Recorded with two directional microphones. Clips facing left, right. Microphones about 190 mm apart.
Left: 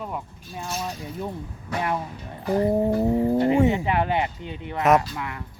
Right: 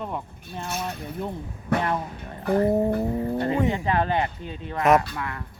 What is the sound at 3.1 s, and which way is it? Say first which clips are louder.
Speech: left 5 dB; 25° left (ahead or behind).